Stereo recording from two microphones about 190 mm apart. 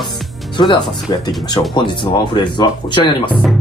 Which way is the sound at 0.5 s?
25° left (ahead or behind).